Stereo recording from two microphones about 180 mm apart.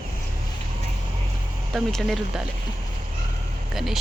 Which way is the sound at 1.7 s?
Centre (ahead or behind).